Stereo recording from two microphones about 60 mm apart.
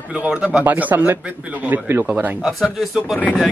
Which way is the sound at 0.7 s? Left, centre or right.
Right.